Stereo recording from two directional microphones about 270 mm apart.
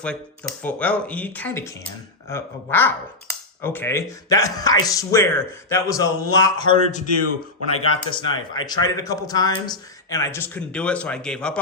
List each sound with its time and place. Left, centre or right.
0.0 s speech: centre
7.7 s speech: left
8.1 s speech: centre